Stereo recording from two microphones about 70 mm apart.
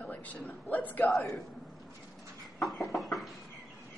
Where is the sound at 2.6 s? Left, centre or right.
Centre.